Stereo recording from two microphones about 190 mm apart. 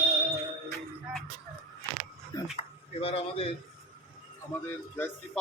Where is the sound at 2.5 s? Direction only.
30° left (ahead or behind).